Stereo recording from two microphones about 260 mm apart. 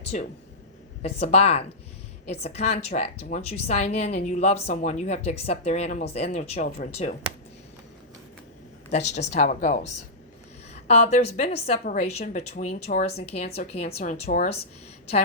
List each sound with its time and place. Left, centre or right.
0.1 s speech: left
8.9 s speech: left